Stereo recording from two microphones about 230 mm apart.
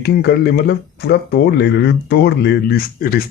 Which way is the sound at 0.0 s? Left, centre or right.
Left.